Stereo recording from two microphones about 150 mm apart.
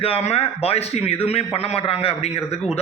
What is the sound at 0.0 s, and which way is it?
A man's voice, 40° left (ahead or behind).